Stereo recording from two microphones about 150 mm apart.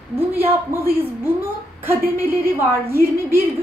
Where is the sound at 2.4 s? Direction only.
15° right (ahead or behind).